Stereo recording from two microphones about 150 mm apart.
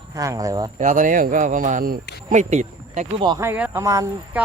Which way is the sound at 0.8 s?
60° right (ahead or behind).